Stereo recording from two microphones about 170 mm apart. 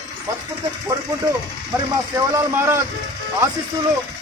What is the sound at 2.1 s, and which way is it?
Speech, 15° right (ahead or behind).